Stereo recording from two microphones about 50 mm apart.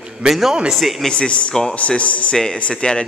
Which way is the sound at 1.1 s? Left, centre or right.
Left.